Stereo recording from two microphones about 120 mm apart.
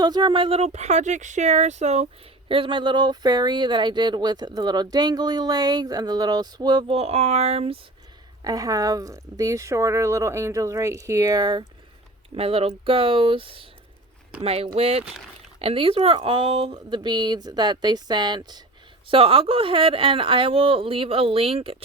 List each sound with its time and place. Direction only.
0.0 s speech: 35° right (ahead or behind); by 2.0 s 65° right (ahead or behind)
2.5 s speech: 45° right (ahead or behind)
6.9 s speech: 60° right (ahead or behind)
8.4 s speech: 30° right (ahead or behind)
12.4 s speech: 50° right (ahead or behind)
16.7 s speech: 40° right (ahead or behind)
19.0 s speech: 50° right (ahead or behind)